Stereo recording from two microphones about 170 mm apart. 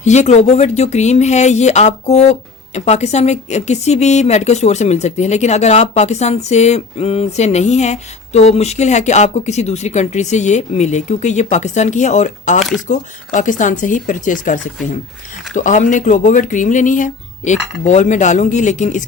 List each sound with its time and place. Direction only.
0.0 s a woman's voice: 40° left (ahead or behind)